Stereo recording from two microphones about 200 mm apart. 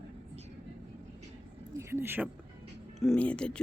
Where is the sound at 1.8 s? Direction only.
10° right (ahead or behind).